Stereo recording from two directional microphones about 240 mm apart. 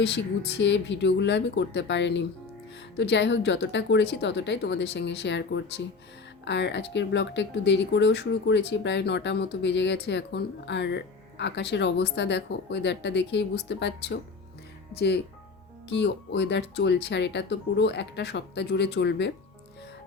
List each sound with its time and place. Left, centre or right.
0.0 s speech: left